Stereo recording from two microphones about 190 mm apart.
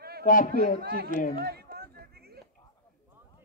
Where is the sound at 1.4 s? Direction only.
55° right (ahead or behind).